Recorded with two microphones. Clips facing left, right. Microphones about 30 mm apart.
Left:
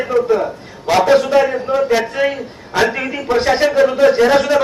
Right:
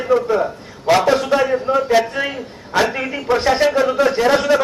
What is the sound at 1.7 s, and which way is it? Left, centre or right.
Speech, centre.